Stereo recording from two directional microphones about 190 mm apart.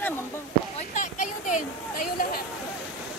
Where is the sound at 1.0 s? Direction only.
40° left (ahead or behind).